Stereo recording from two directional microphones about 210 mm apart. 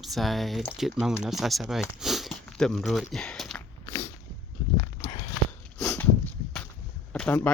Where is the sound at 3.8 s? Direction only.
15° left (ahead or behind).